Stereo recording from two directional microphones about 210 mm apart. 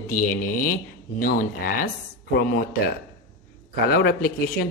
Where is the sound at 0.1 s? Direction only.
40° left (ahead or behind).